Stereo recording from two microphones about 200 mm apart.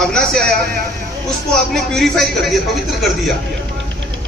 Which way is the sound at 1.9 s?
Centre (ahead or behind).